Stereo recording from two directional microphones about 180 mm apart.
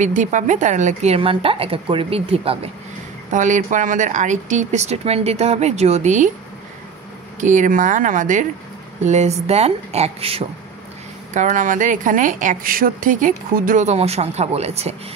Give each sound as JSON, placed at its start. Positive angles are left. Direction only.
{"t": 0.0, "sound": "speech", "side_deg": -45}
{"t": 3.3, "sound": "speech", "side_deg": -45}
{"t": 7.3, "sound": "speech", "side_deg": -45}